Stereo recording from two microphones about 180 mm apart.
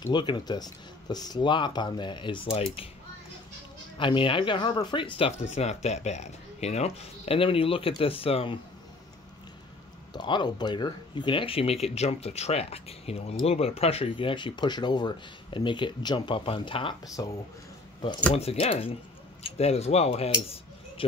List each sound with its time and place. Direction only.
0.0 s speech: 25° left (ahead or behind)
4.0 s speech: 25° left (ahead or behind)
10.1 s speech: 25° left (ahead or behind)
18.3 s speech: 35° left (ahead or behind)